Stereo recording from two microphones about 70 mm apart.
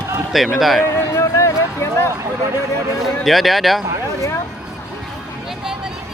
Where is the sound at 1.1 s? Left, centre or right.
Left.